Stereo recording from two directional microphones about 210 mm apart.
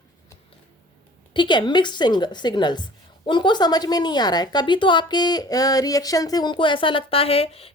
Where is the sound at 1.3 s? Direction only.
20° left (ahead or behind).